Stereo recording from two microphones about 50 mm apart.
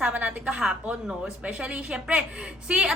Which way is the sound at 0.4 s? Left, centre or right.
Centre.